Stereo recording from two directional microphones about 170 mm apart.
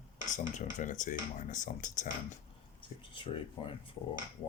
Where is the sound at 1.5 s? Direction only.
50° left (ahead or behind).